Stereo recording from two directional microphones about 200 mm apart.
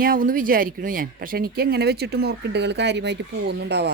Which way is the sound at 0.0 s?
45° right (ahead or behind).